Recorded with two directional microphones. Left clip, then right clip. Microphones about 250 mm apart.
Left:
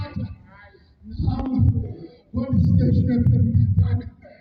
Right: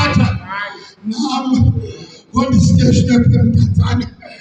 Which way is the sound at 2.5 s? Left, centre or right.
Centre.